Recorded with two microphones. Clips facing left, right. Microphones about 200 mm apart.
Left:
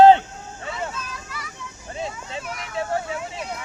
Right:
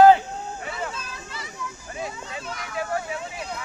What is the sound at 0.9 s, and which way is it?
Vehicle, 30° right (ahead or behind).